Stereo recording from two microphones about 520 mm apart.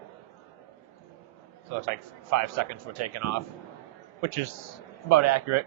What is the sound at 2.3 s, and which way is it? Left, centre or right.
A man's voice, right.